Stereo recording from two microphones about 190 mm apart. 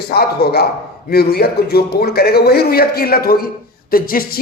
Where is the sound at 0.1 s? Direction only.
55° left (ahead or behind).